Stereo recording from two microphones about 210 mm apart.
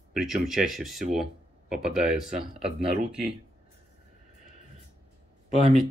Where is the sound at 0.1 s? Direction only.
Centre (ahead or behind).